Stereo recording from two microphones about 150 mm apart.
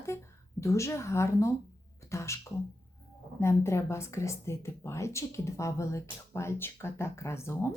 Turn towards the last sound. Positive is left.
turn(degrees=20)  # may be behind; listen again after turning